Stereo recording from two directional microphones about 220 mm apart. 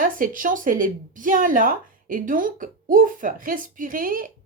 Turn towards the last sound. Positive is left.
turn(degrees=-40)  # may be behind; listen again after turning